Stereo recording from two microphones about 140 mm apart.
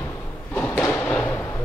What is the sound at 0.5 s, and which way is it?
Thump, 15° left (ahead or behind).